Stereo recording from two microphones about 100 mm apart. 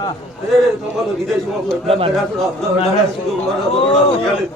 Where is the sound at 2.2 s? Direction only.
Centre (ahead or behind).